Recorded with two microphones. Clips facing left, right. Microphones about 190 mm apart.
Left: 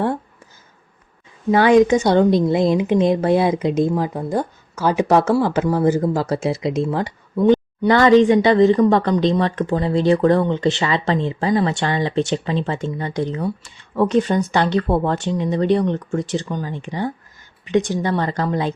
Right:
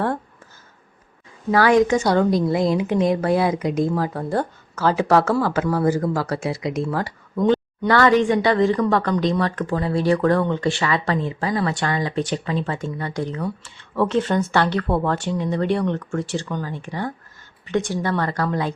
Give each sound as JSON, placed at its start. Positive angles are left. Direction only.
{"t": 1.5, "sound": "speech", "side_deg": 20}